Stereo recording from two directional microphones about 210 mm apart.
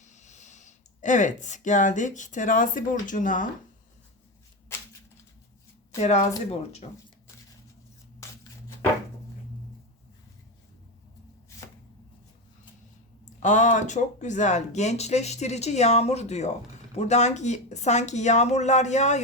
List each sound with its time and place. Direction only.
0.0 s speech: 35° left (ahead or behind)
6.0 s speech: 30° left (ahead or behind)
13.4 s speech: 35° left (ahead or behind)